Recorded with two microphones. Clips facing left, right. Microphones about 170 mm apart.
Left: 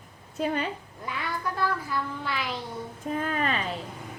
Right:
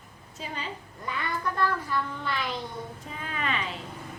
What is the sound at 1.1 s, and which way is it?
Child singing, 5° left (ahead or behind).